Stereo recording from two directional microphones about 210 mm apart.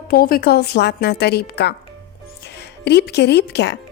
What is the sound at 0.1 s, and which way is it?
A woman's voice, 45° left (ahead or behind).